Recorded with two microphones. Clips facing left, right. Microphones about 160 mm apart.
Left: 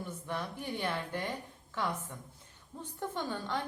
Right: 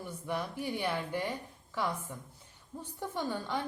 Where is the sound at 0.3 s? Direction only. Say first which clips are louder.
Right 4 dB; 10° right (ahead or behind).